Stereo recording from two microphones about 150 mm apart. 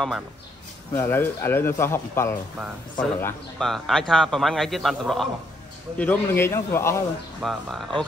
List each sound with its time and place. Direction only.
0.9 s a man's voice: 15° left (ahead or behind)
3.5 s a man's voice: centre (ahead or behind)
5.9 s a man's voice: 10° left (ahead or behind)
7.4 s a man's voice: centre (ahead or behind)